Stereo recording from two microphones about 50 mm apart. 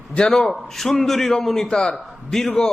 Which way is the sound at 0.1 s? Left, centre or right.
Centre.